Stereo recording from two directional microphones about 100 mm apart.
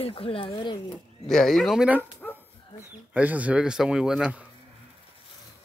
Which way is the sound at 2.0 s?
20° left (ahead or behind).